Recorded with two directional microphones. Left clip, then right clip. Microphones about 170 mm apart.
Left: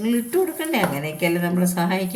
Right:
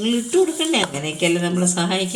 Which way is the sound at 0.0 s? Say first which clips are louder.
Right 3 dB; 5° right (ahead or behind).